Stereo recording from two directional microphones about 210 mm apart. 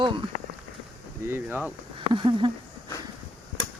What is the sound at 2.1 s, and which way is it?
Speech, 25° right (ahead or behind).